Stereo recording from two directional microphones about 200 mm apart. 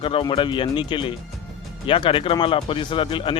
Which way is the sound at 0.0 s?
25° left (ahead or behind).